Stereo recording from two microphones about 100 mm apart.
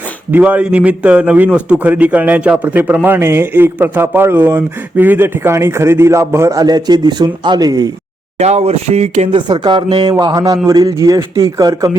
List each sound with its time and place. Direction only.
0.3 s a man's voice: 15° right (ahead or behind)
6.6 s speech: 40° right (ahead or behind)
8.4 s speech: 90° right
9.5 s speech: 50° right (ahead or behind)
10.2 s speech: 40° right (ahead or behind)